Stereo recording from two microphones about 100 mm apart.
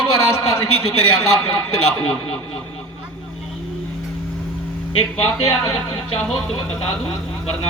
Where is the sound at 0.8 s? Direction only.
85° left.